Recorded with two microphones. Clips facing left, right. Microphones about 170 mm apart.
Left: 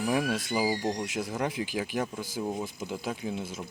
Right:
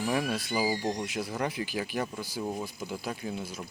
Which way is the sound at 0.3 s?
20° left (ahead or behind).